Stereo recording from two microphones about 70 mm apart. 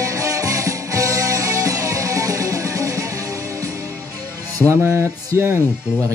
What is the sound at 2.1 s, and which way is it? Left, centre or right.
Music, right.